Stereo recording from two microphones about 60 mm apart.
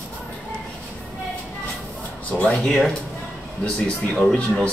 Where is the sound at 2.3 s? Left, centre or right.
Centre.